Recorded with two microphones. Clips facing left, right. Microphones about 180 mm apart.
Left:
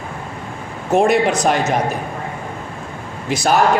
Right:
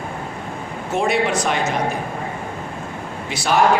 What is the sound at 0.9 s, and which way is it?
Speech, 40° left (ahead or behind).